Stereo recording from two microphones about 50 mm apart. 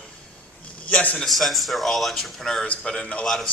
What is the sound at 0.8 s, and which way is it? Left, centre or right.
Speech, left.